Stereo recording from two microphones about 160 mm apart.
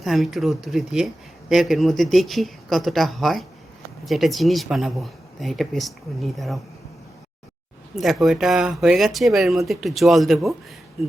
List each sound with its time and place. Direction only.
0.0 s speech: centre (ahead or behind)
7.9 s speech: centre (ahead or behind)